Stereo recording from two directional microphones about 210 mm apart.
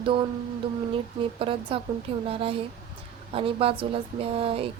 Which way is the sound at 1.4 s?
25° right (ahead or behind).